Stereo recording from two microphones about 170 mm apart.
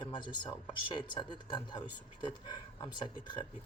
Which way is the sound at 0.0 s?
25° left (ahead or behind).